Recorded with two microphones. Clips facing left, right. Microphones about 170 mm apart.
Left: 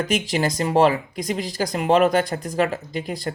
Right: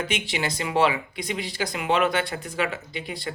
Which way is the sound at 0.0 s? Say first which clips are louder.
Left 6 dB; 40° left (ahead or behind).